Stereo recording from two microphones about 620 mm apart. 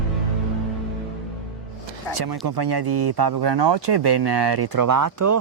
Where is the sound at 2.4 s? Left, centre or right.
Right.